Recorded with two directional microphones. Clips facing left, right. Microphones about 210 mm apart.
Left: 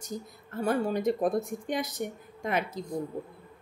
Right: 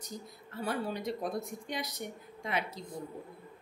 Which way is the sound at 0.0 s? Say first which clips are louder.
Left 6 dB; 45° left (ahead or behind).